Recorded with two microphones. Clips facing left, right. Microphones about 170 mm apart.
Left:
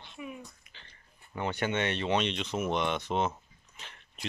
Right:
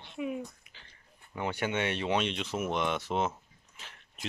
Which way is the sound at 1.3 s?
10° right (ahead or behind).